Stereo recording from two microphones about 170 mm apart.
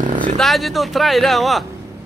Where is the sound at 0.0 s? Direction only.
45° right (ahead or behind).